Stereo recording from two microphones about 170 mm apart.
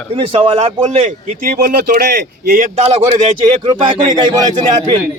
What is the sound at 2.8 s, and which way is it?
A man's voice, 35° right (ahead or behind).